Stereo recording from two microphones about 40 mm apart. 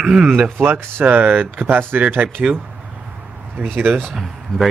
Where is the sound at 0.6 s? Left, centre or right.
Right.